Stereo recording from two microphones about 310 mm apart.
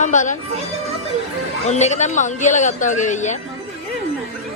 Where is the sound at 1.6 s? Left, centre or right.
Left.